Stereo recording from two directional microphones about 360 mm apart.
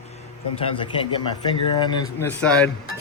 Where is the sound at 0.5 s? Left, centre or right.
Centre.